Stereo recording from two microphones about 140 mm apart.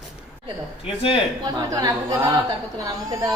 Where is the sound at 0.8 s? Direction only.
40° left (ahead or behind).